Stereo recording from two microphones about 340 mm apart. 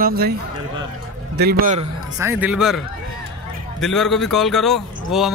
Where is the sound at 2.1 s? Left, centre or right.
Centre.